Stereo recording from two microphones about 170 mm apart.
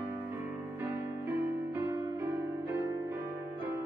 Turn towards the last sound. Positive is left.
turn(degrees=-20)  # may be behind; listen again after turning